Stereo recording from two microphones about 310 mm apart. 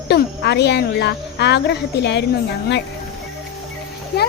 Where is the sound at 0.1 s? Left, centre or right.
Left.